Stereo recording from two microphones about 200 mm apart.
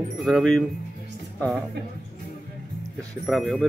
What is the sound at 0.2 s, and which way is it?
Speech, centre (ahead or behind).